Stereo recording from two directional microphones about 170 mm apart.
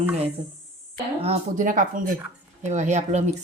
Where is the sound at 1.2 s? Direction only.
35° right (ahead or behind).